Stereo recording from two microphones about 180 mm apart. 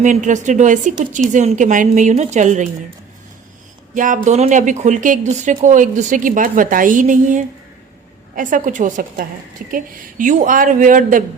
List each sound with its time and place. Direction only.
0.0 s speech: 45° right (ahead or behind)
3.9 s speech: 45° right (ahead or behind)